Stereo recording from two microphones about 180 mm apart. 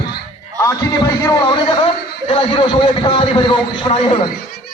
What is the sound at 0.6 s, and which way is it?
Speech, 15° left (ahead or behind).